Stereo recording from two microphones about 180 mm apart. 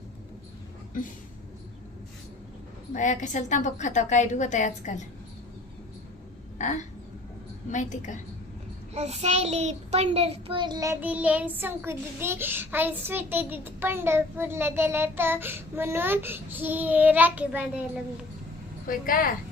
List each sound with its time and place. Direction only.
2.9 s a woman's voice: 40° left (ahead or behind)
6.6 s a sound: 40° left (ahead or behind)
7.7 s a woman's voice: 40° left (ahead or behind)
9.0 s a child's voice: 35° right (ahead or behind); by 10.9 s 20° right (ahead or behind)
11.0 s child singing: 10° right (ahead or behind)
18.9 s a woman's voice: 50° left (ahead or behind)